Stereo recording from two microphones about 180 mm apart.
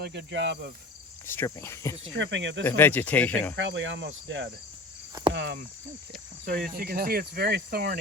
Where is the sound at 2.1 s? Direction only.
90° right.